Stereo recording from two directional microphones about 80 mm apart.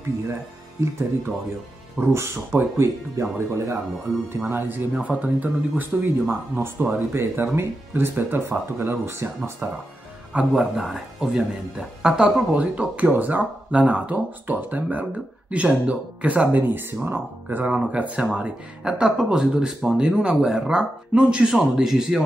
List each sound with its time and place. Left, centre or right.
0.3 s speech: right
4.9 s speech: centre
7.1 s speech: right
10.3 s speech: centre